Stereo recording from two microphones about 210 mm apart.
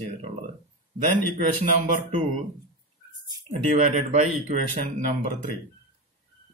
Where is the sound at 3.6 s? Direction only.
35° right (ahead or behind).